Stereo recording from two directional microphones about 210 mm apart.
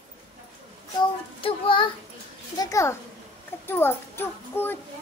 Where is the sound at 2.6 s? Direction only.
15° left (ahead or behind).